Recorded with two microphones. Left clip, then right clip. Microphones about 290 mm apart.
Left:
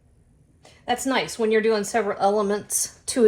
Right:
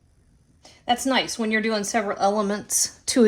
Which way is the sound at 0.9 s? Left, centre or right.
Right.